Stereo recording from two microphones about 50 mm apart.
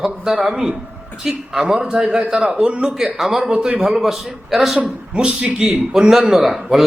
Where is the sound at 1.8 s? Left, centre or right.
Centre.